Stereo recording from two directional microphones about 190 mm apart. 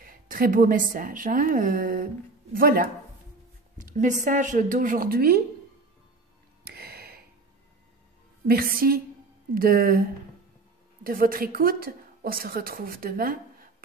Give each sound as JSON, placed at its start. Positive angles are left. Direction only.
{"t": 0.0, "sound": "a woman's voice", "side_deg": -50}
{"t": 6.6, "sound": "a sound", "side_deg": -55}
{"t": 8.5, "sound": "a woman's voice", "side_deg": -50}
{"t": 11.1, "sound": "a woman's voice", "side_deg": -50}